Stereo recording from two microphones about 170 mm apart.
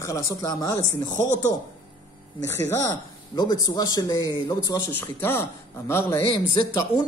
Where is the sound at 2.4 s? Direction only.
15° left (ahead or behind).